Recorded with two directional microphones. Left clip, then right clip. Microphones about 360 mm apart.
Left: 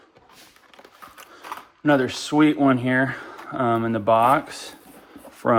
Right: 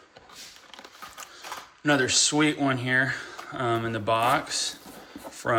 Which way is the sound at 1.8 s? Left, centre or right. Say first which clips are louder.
Left 2 dB; centre.